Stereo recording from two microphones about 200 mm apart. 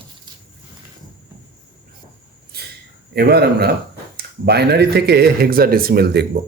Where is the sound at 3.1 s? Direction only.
55° right (ahead or behind).